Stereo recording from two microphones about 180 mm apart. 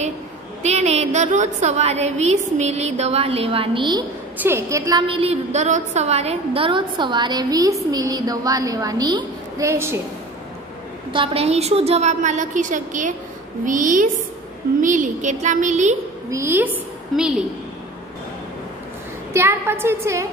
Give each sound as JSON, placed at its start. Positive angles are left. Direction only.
{"t": 0.6, "sound": "a woman's voice", "side_deg": -35}
{"t": 4.4, "sound": "a woman's voice", "side_deg": -15}
{"t": 5.0, "sound": "a woman's voice", "side_deg": -30}
{"t": 11.1, "sound": "a woman's voice", "side_deg": -35}
{"t": 16.3, "sound": "a woman's voice", "side_deg": -15}
{"t": 19.3, "sound": "a woman's voice", "side_deg": -15}